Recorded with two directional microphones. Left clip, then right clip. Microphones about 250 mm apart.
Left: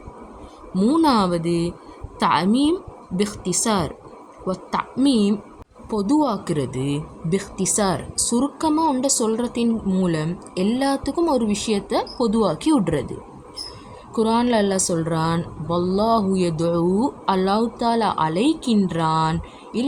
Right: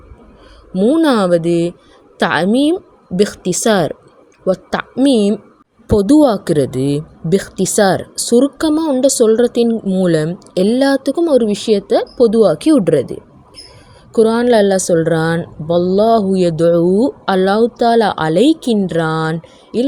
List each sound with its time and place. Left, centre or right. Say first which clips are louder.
0.7 s a woman's voice: right 6 dB; centre